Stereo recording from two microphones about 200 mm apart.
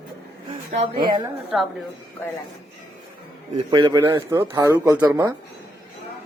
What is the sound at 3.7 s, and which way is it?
Speech, 20° right (ahead or behind).